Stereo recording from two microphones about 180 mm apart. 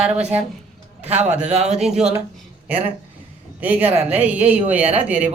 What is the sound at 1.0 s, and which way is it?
Speech, 35° right (ahead or behind).